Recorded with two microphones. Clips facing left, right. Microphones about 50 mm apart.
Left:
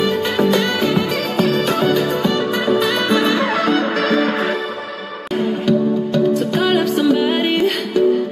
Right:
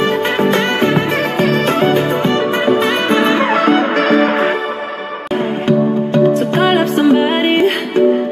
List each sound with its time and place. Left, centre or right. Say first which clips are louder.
0.0 s music: right 3 dB; right
5.7 s music: right 4 dB; right